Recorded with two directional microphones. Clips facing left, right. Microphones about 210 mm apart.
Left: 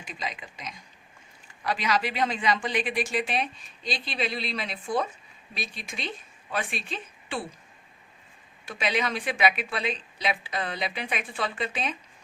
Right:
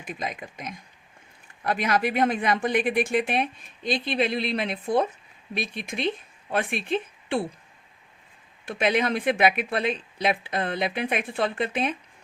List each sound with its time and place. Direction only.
0.0 s a woman's voice: 55° right (ahead or behind)
8.8 s speech: 55° right (ahead or behind)